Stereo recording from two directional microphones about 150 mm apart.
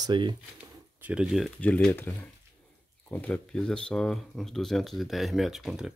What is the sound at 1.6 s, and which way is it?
Speech, 10° left (ahead or behind).